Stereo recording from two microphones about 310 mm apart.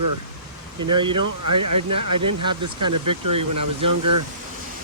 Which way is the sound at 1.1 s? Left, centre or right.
Right.